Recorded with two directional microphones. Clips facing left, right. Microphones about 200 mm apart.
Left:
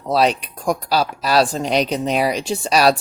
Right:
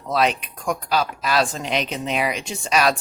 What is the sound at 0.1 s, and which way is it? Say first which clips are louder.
Speech: left 4 dB; 35° left (ahead or behind).